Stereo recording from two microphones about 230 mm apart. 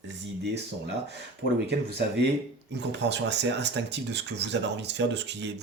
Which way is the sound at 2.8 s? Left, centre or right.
Right.